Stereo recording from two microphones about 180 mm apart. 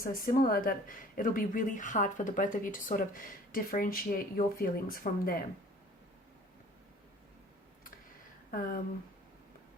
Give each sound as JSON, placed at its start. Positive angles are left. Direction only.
{"t": 0.0, "sound": "speech", "side_deg": 50}
{"t": 8.4, "sound": "speech", "side_deg": 50}